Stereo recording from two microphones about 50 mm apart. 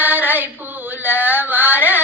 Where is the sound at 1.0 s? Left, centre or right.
Right.